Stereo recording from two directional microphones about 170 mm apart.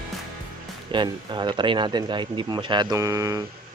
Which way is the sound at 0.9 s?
25° right (ahead or behind).